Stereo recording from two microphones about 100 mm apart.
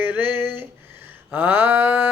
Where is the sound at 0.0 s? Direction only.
20° right (ahead or behind).